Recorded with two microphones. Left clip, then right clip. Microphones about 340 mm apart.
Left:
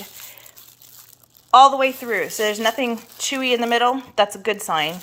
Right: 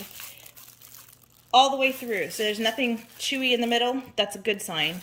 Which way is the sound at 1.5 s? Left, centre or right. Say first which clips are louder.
Left 8 dB; left.